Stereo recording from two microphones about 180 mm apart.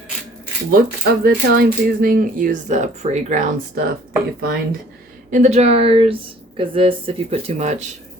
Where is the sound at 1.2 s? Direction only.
55° right (ahead or behind).